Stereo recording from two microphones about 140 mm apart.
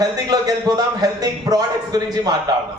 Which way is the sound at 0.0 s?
30° right (ahead or behind).